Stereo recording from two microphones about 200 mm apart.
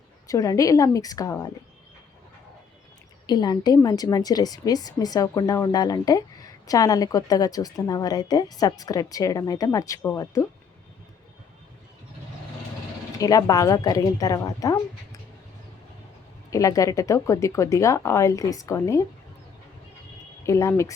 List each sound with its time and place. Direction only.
0.3 s a woman's voice: 15° left (ahead or behind)
3.2 s a woman's voice: 20° left (ahead or behind)
13.1 s a woman's voice: 20° left (ahead or behind)
16.5 s a woman's voice: 15° left (ahead or behind)
20.4 s a woman's voice: 15° left (ahead or behind)